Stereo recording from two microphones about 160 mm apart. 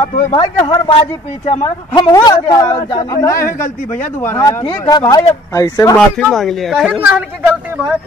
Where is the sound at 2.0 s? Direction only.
25° left (ahead or behind).